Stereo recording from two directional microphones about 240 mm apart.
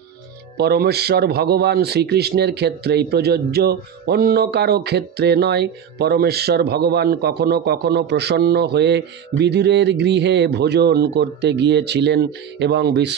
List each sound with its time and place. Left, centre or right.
0.6 s speech: right